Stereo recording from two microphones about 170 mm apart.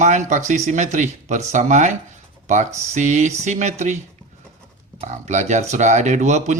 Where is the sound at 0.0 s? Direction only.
45° right (ahead or behind).